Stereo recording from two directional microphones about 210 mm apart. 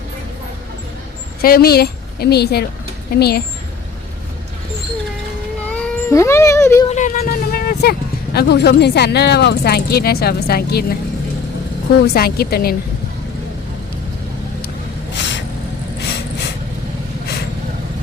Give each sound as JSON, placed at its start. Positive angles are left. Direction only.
{"t": 1.4, "sound": "a woman's voice", "side_deg": 45}
{"t": 5.7, "sound": "speech", "side_deg": 10}
{"t": 6.8, "sound": "speech", "side_deg": 35}
{"t": 12.0, "sound": "speech", "side_deg": 50}
{"t": 15.1, "sound": "vehicle", "side_deg": 55}